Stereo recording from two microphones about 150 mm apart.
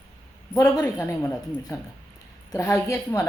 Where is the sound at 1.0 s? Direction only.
10° left (ahead or behind).